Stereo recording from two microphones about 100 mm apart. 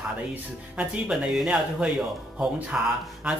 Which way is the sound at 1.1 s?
5° right (ahead or behind).